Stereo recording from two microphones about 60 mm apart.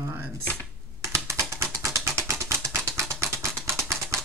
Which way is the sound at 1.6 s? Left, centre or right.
Right.